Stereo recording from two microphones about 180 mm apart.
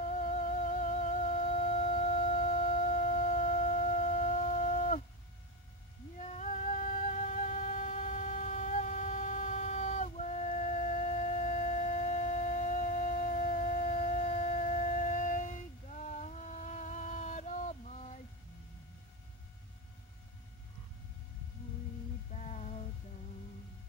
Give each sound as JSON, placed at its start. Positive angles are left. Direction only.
{"t": 0.1, "sound": "music", "side_deg": 45}
{"t": 6.1, "sound": "music", "side_deg": 40}
{"t": 22.3, "sound": "music", "side_deg": 40}